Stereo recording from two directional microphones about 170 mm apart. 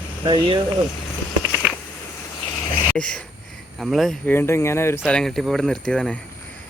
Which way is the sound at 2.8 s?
5° left (ahead or behind).